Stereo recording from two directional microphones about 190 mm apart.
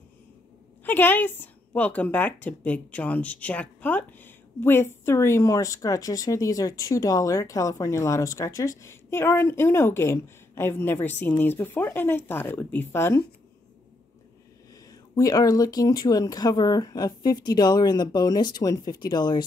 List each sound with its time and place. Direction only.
0.8 s a woman's voice: 10° left (ahead or behind)
14.9 s speech: 20° left (ahead or behind)